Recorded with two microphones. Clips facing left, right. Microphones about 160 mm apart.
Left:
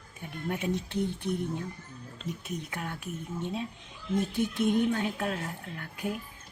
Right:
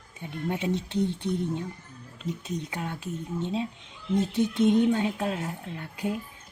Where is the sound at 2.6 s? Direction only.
25° right (ahead or behind).